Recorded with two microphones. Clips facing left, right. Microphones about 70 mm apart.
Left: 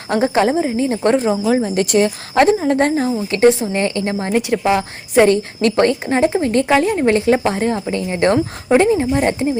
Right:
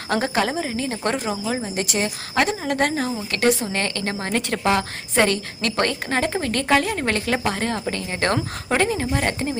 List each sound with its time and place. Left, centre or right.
0.1 s a woman's voice: left
1.7 s speech: left
2.0 s a woman's voice: left; by 5.3 s centre
5.3 s a woman's voice: left